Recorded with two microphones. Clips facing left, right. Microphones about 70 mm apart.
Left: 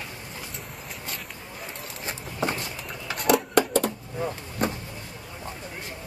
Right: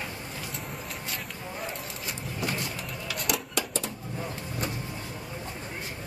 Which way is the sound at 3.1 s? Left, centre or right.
Left.